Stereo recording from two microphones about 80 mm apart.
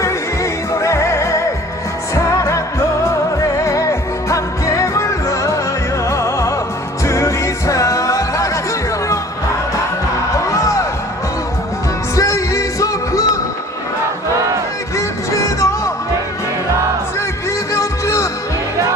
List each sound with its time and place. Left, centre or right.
0.7 s music: left
3.6 s music: left
10.3 s music: left
12.1 s music: left
14.9 s music: left
17.7 s music: left